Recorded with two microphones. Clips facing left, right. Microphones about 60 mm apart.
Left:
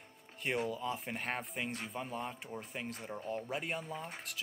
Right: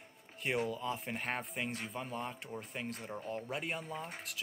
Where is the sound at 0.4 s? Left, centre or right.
Centre.